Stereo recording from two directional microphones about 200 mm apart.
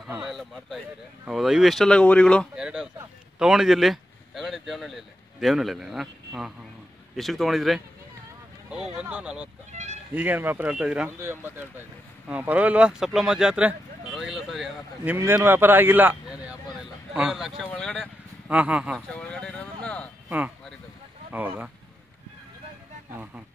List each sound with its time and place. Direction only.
0.0 s speech: centre (ahead or behind)
9.7 s a sound: 35° right (ahead or behind)
10.1 s speech: 10° right (ahead or behind)
18.5 s speech: 5° right (ahead or behind)
19.1 s speech: 5° left (ahead or behind)
20.2 s speech: 10° right (ahead or behind)